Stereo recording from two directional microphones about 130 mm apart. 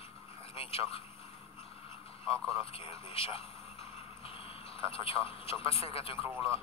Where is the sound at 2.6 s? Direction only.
50° left (ahead or behind).